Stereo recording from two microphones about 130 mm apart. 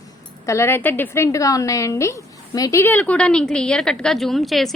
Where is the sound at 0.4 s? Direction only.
20° left (ahead or behind).